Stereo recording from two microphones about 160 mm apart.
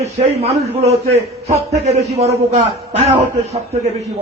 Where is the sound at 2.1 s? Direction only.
40° right (ahead or behind).